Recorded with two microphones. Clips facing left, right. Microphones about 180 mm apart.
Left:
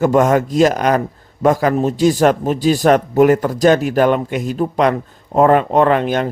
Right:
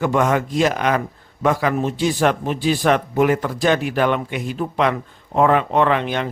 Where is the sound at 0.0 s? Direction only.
40° left (ahead or behind).